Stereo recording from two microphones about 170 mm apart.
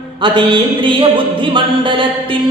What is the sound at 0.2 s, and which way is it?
Music, 30° right (ahead or behind).